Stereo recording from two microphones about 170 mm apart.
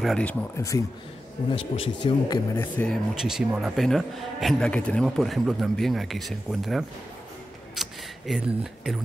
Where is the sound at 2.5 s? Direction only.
10° left (ahead or behind).